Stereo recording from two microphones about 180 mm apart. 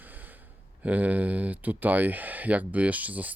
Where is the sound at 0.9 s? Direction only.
10° right (ahead or behind).